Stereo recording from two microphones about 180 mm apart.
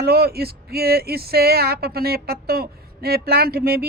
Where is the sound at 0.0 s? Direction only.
60° right (ahead or behind).